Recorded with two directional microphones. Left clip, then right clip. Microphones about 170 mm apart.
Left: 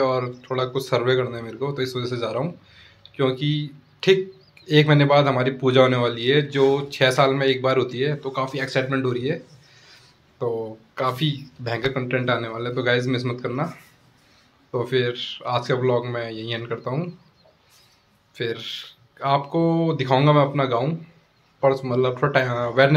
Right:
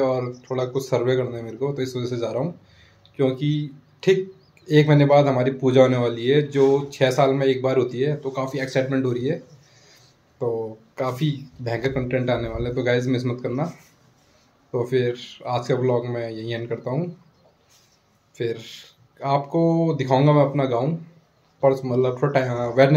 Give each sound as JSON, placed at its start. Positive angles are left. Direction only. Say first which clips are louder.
{"t": 0.0, "sound": "speech", "louder": "left 1 dB", "side_deg": -15}
{"t": 10.5, "sound": "speech", "louder": "right 1 dB", "side_deg": 5}
{"t": 11.0, "sound": "speech", "louder": "left 2 dB", "side_deg": -15}
{"t": 14.8, "sound": "speech", "louder": "even", "side_deg": -15}
{"t": 18.3, "sound": "speech", "louder": "even", "side_deg": -15}